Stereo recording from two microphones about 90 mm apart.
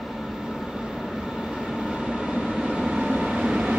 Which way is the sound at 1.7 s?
10° right (ahead or behind).